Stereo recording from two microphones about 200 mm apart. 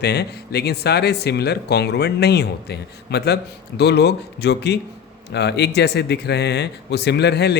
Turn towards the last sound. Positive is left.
turn(degrees=55)  # may be behind; listen again after turning